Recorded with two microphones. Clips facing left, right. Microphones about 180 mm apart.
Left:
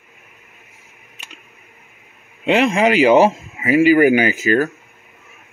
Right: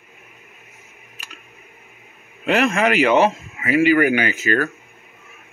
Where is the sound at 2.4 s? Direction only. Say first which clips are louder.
Left 3 dB; 30° left (ahead or behind).